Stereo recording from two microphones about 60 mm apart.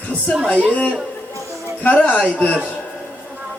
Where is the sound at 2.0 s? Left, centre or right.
Left.